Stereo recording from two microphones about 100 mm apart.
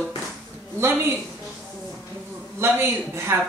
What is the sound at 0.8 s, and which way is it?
Speech, 25° right (ahead or behind).